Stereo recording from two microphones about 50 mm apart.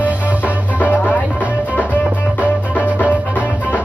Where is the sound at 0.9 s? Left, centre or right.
Left.